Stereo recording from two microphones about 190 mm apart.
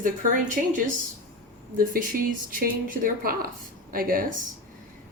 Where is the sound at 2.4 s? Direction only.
45° right (ahead or behind).